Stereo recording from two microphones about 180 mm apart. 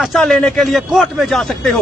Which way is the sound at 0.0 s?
Centre (ahead or behind).